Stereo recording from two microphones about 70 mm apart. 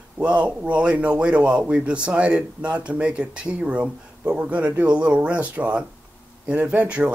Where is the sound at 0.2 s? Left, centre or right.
Centre.